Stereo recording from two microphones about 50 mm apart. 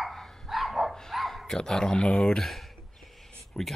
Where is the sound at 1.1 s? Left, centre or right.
Centre.